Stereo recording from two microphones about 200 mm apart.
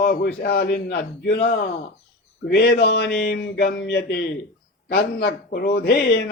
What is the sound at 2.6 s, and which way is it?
A man's voice, 50° left (ahead or behind).